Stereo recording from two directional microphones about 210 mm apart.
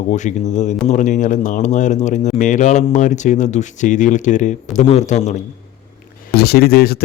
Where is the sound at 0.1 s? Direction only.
35° left (ahead or behind).